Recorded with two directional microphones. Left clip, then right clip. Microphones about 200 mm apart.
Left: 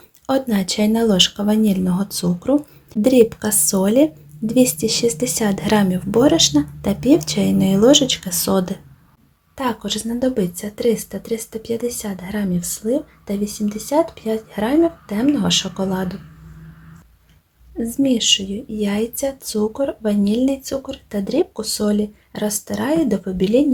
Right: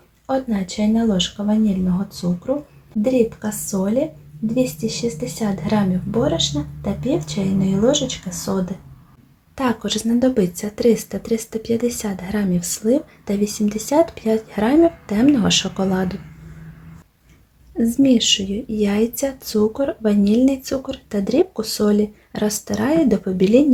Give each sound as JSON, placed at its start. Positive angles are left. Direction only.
{"t": 0.3, "sound": "a woman's voice", "side_deg": 45}
{"t": 9.6, "sound": "a woman's voice", "side_deg": -5}
{"t": 17.7, "sound": "a woman's voice", "side_deg": -10}